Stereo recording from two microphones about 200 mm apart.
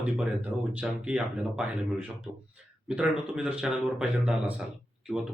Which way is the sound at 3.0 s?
5° right (ahead or behind).